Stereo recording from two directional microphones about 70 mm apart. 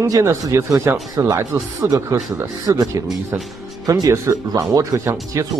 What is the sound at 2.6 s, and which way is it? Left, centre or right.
Speech, right.